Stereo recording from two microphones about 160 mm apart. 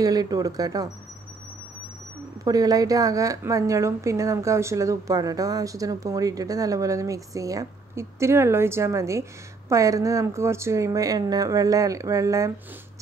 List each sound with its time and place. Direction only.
0.0 s a woman's voice: 25° right (ahead or behind)
2.4 s a woman's voice: 25° right (ahead or behind)